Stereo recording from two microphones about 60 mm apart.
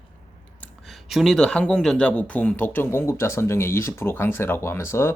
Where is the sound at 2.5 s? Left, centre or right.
Left.